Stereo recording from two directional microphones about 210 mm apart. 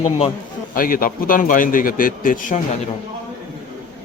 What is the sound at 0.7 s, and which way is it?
A man's voice, 40° left (ahead or behind).